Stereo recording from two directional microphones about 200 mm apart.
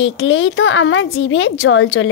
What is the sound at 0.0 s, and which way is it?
A woman's voice, 65° left (ahead or behind).